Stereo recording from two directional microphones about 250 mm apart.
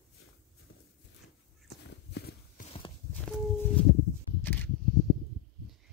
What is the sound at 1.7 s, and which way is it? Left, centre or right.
Walk, left.